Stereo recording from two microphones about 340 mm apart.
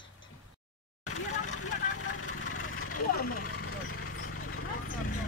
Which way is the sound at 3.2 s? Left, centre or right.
Left.